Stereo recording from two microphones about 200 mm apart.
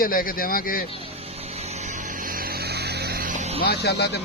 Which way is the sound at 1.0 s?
30° right (ahead or behind).